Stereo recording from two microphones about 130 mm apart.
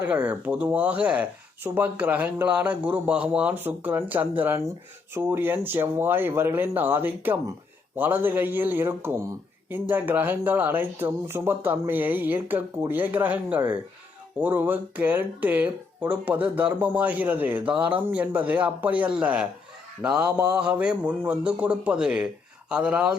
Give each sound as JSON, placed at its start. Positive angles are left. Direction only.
{"t": 0.0, "sound": "speech", "side_deg": -15}